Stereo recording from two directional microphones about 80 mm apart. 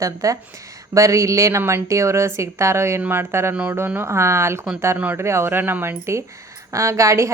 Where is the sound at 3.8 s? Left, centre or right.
Right.